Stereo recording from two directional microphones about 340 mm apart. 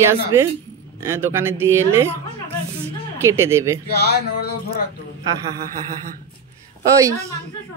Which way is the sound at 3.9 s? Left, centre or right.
Left.